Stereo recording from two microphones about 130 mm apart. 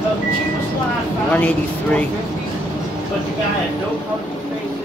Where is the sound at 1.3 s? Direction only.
10° left (ahead or behind).